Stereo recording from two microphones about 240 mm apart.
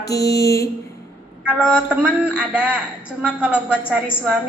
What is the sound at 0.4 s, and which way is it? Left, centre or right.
Speech, centre.